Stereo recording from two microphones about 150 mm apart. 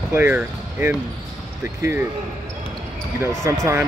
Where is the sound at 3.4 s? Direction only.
20° right (ahead or behind).